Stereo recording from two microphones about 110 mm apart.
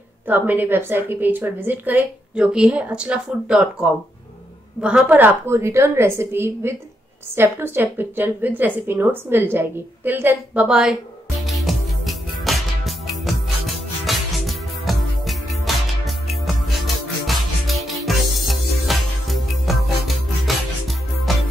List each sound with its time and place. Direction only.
0.3 s a woman's voice: 15° right (ahead or behind)
11.4 s music: centre (ahead or behind)